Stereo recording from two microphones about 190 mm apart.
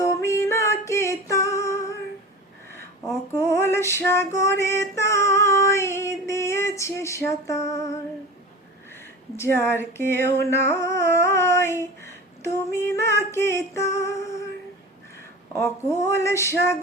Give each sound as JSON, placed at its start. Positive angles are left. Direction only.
{"t": 0.0, "sound": "music", "side_deg": 15}
{"t": 2.7, "sound": "female singing", "side_deg": 15}
{"t": 9.6, "sound": "female singing", "side_deg": 10}
{"t": 10.3, "sound": "a sound", "side_deg": 15}
{"t": 13.0, "sound": "music", "side_deg": 15}
{"t": 15.5, "sound": "female singing", "side_deg": 15}